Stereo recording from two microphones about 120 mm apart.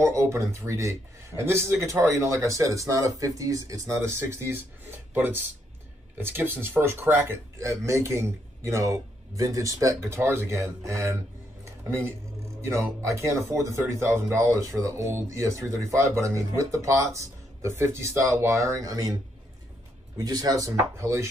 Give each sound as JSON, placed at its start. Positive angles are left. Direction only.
{"t": 0.0, "sound": "speech", "side_deg": -20}
{"t": 12.6, "sound": "speech", "side_deg": -25}
{"t": 20.2, "sound": "speech", "side_deg": -30}